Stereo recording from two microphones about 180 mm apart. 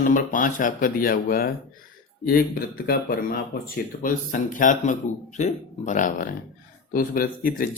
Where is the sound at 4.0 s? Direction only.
45° left (ahead or behind).